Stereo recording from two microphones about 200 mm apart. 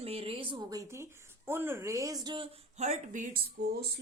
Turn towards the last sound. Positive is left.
turn(degrees=-55)  # may be behind; listen again after turning